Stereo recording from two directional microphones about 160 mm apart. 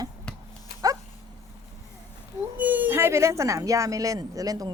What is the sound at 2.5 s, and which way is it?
Speech, 10° right (ahead or behind).